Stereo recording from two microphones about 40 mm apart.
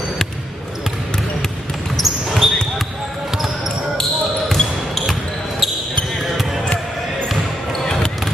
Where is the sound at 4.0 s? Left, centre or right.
Centre.